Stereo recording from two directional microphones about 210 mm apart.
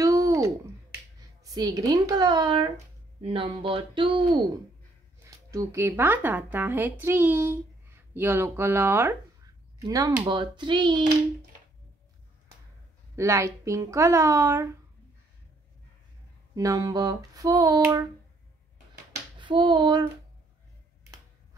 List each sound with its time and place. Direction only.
0.0 s a sound: 15° right (ahead or behind)
1.4 s speech: 15° right (ahead or behind)
13.1 s speech: 15° right (ahead or behind)
16.5 s speech: 15° right (ahead or behind)
19.4 s speech: 25° right (ahead or behind)